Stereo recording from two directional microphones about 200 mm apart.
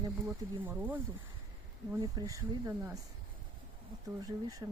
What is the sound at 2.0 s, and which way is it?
Speech, 20° right (ahead or behind).